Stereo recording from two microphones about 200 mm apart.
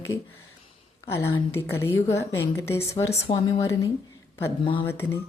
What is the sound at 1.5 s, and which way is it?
A woman's voice, 10° left (ahead or behind).